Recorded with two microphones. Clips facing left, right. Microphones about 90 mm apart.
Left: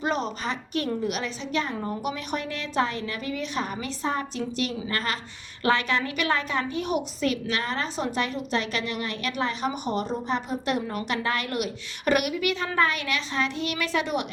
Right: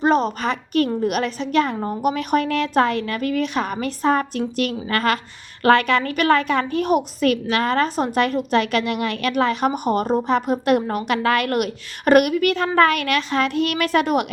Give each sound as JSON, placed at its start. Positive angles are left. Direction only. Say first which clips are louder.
{"t": 0.0, "sound": "a sound", "louder": "right 9 dB", "side_deg": -40}
{"t": 0.4, "sound": "a woman's voice", "louder": "right 8 dB", "side_deg": -55}
{"t": 5.6, "sound": "a woman's voice", "louder": "right 8 dB", "side_deg": -60}